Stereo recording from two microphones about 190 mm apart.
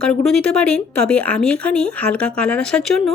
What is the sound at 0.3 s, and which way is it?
Speech, 5° left (ahead or behind).